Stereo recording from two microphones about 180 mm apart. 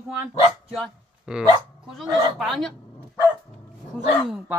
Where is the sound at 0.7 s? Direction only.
5° right (ahead or behind).